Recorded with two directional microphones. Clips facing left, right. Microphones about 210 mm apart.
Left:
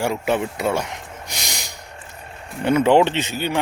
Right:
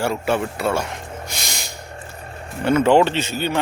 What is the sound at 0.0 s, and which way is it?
Speech, 15° left (ahead or behind).